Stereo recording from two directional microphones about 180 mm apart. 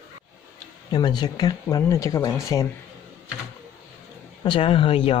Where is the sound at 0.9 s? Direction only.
25° left (ahead or behind).